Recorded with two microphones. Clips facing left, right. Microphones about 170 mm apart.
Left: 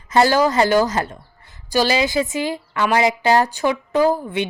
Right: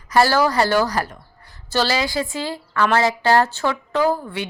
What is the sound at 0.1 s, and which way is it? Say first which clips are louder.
Speech: left 1 dB; 20° left (ahead or behind).